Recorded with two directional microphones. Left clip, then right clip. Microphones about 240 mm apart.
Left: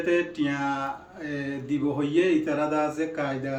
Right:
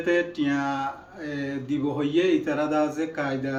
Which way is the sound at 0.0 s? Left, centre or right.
Centre.